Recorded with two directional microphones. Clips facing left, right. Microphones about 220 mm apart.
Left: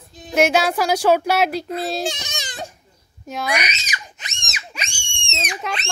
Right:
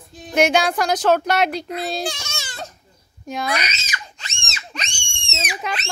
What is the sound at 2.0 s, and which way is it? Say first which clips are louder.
Speech: left 2 dB; 20° left (ahead or behind).